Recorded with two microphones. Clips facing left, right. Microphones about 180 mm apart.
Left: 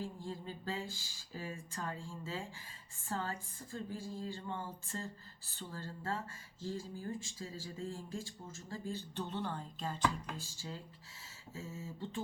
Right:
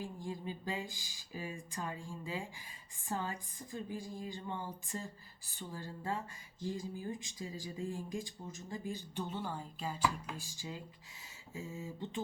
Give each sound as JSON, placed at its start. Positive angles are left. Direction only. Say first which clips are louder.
{"t": 0.0, "sound": "speech", "louder": "right 1 dB", "side_deg": -15}